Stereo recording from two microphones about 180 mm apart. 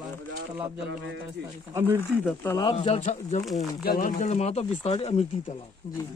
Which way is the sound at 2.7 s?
35° left (ahead or behind).